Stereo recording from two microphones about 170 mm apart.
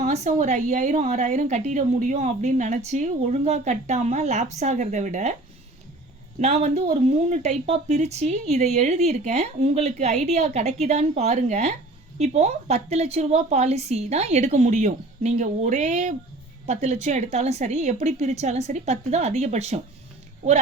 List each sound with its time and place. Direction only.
0.0 s a woman's voice: 40° right (ahead or behind)
6.4 s a woman's voice: 40° right (ahead or behind)